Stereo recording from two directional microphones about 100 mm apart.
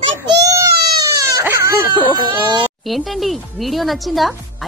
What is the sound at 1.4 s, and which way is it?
Speech, 30° right (ahead or behind).